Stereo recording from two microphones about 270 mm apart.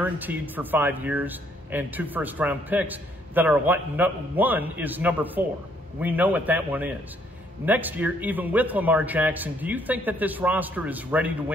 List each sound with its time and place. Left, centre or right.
0.0 s a man's voice: centre